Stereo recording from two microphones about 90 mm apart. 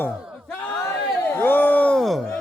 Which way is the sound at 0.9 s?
20° left (ahead or behind).